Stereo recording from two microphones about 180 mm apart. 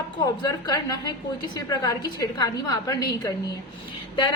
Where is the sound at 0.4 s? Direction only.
20° left (ahead or behind).